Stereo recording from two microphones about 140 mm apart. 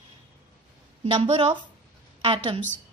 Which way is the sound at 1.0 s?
40° right (ahead or behind).